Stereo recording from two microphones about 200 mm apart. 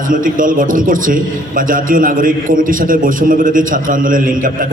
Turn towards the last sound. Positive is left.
turn(degrees=-45)  # may be behind; listen again after turning